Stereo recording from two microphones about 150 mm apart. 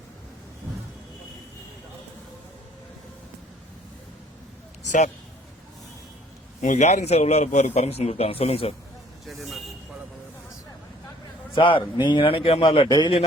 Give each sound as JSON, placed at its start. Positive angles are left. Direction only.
{"t": 4.8, "sound": "a sound", "side_deg": 55}
{"t": 6.6, "sound": "a man's voice", "side_deg": 55}
{"t": 9.2, "sound": "speech", "side_deg": 0}
{"t": 11.5, "sound": "a man's voice", "side_deg": 35}